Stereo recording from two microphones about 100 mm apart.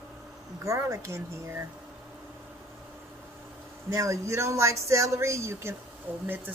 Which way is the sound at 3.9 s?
30° right (ahead or behind).